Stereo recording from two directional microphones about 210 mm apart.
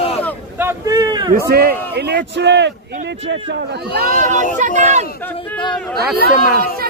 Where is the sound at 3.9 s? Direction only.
40° right (ahead or behind).